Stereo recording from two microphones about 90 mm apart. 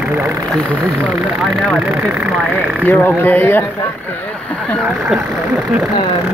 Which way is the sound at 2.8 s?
20° left (ahead or behind).